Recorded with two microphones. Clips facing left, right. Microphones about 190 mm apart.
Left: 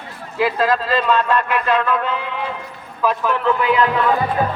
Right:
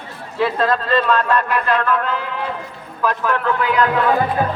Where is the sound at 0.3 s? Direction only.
5° left (ahead or behind).